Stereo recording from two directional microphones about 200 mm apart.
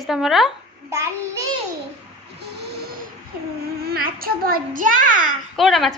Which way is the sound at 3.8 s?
50° right (ahead or behind).